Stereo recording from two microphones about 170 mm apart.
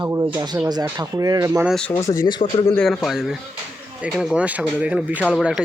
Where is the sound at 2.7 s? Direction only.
5° left (ahead or behind).